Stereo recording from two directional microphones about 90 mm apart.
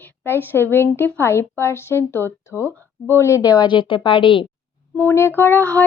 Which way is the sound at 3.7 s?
65° left (ahead or behind).